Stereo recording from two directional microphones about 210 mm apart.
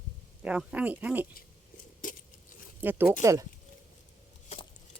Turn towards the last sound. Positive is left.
turn(degrees=-15)  # may be behind; listen again after turning